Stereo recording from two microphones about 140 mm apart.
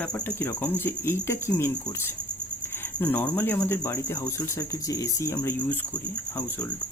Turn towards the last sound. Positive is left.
turn(degrees=15)  # may be behind; listen again after turning